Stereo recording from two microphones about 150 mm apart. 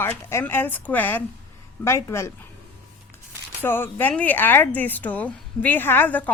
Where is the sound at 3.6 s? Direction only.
15° left (ahead or behind).